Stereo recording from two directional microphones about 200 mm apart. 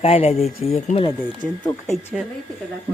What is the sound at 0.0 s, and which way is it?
Speech, 30° left (ahead or behind).